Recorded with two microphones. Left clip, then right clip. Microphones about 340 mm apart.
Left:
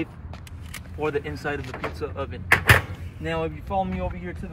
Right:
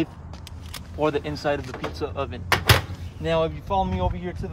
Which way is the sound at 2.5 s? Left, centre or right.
Centre.